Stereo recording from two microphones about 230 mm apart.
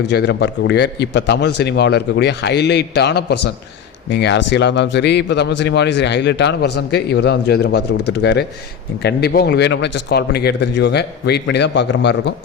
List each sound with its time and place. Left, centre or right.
0.0 s a man's voice: left